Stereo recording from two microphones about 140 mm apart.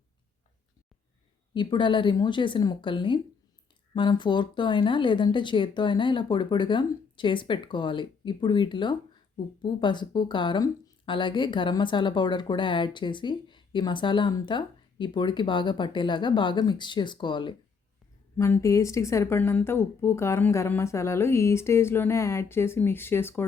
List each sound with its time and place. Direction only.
1.5 s speech: 35° left (ahead or behind)
18.3 s a woman's voice: 20° left (ahead or behind)